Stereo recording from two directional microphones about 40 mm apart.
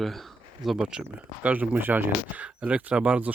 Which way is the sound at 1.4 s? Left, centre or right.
Right.